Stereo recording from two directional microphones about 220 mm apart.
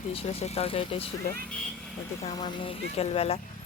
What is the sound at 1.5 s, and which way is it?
Speech, 5° left (ahead or behind).